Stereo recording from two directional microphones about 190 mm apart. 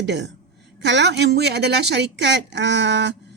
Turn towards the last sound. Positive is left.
turn(degrees=-65)  # may be behind; listen again after turning